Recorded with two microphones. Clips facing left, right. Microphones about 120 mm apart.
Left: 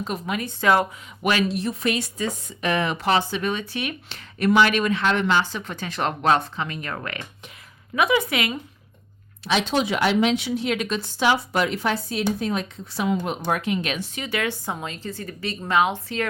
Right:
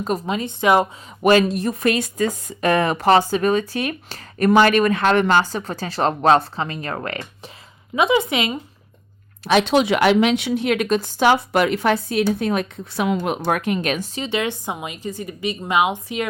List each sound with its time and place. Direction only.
0.3 s speech: 25° right (ahead or behind)
1.2 s speech: 40° right (ahead or behind)
7.9 s speech: 25° right (ahead or behind)
9.4 s a woman's voice: 55° right (ahead or behind)
14.2 s speech: 20° right (ahead or behind)